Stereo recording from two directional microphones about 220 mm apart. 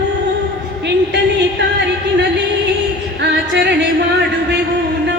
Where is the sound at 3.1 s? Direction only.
50° right (ahead or behind).